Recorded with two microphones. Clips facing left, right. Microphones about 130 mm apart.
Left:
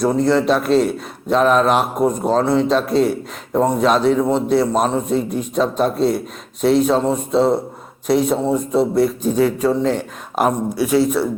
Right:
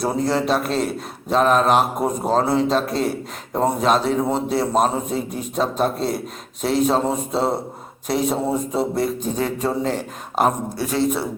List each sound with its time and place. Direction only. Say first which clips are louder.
0.0 s a man's voice: left 5 dB; centre (ahead or behind)